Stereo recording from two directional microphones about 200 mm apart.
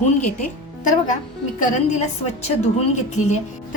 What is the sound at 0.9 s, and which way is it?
A woman's voice, 40° left (ahead or behind).